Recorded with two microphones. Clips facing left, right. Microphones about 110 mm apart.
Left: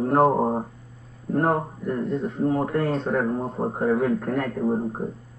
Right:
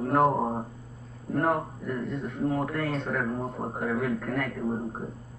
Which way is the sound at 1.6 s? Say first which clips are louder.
Left 5 dB; 35° left (ahead or behind).